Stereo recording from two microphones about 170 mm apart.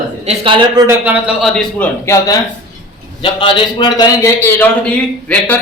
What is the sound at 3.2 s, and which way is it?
A man's voice, 30° left (ahead or behind).